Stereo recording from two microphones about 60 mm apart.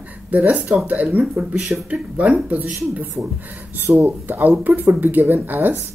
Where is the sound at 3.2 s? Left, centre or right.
Right.